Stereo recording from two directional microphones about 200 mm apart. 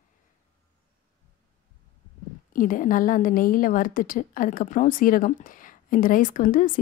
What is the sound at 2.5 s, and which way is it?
A woman's voice, 40° left (ahead or behind).